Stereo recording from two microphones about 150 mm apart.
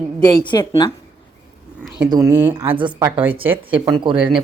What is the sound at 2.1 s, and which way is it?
Speech, 25° right (ahead or behind).